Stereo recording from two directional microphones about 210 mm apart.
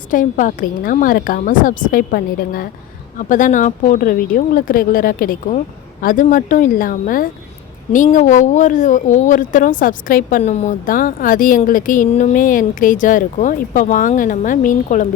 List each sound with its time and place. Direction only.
0.1 s speech: 40° left (ahead or behind)